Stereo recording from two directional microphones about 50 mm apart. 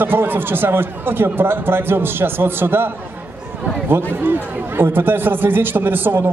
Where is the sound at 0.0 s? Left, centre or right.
Right.